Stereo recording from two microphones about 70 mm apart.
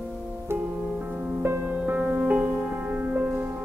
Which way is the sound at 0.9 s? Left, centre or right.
Centre.